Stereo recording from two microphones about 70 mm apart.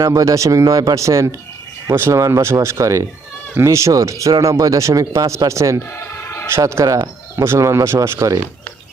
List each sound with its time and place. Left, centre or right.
0.0 s speech: right
6.8 s speech: right
7.3 s speech: right